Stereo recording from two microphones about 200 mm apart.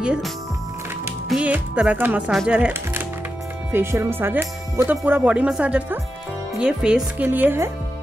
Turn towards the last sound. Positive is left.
turn(degrees=-10)  # may be behind; listen again after turning